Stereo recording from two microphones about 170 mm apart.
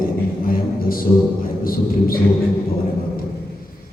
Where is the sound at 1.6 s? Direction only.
60° left (ahead or behind).